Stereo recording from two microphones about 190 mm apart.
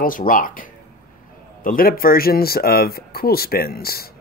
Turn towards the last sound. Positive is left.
turn(degrees=55)  # may be behind; listen again after turning